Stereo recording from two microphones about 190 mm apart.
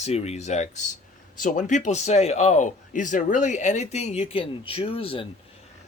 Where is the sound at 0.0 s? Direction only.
35° left (ahead or behind).